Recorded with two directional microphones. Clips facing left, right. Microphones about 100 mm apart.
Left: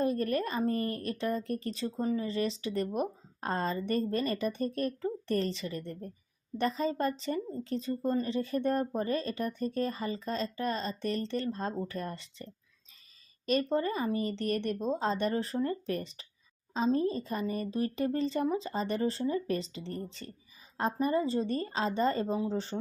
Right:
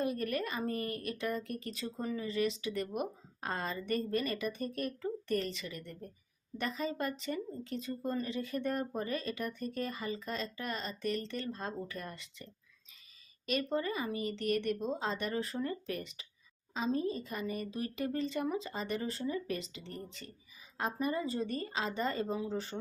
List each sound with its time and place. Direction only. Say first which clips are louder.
0.0 s speech: left 5 dB; 35° left (ahead or behind)